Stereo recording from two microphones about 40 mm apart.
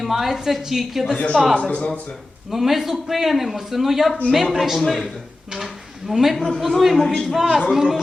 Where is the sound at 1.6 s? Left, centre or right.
Left.